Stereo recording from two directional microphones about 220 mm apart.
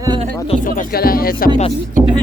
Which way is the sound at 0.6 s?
40° left (ahead or behind).